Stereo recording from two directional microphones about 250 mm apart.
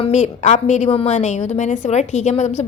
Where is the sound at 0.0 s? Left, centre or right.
Left.